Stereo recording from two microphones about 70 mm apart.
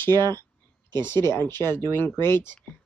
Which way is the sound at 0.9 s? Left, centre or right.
Left.